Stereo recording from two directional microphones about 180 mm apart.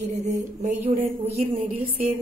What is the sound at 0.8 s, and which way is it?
Speech, 35° right (ahead or behind).